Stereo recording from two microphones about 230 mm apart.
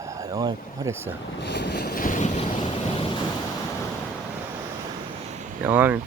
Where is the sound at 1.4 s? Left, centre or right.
Left.